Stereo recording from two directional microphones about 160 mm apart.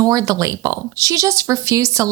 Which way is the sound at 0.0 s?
20° right (ahead or behind).